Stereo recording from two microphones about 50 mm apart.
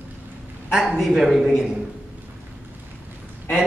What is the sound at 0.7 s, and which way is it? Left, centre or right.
Speech, centre.